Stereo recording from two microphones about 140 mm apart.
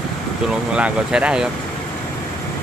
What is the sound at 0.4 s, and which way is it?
Speech, 5° right (ahead or behind).